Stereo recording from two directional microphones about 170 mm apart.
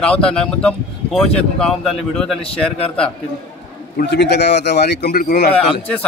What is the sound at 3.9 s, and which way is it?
Speech, 75° left (ahead or behind).